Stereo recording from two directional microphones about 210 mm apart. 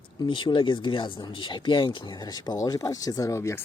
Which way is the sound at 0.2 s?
20° left (ahead or behind).